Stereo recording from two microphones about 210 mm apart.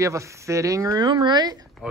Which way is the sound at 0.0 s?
15° right (ahead or behind).